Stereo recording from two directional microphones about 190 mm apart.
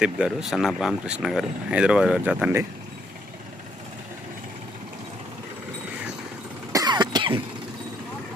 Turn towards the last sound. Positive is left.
turn(degrees=-25)  # may be behind; listen again after turning